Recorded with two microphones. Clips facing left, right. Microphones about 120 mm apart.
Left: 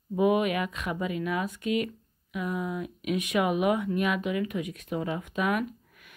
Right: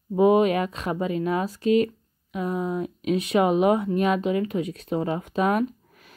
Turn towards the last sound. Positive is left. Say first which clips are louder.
# right 5 dB
turn(degrees=-35)  # may be behind; listen again after turning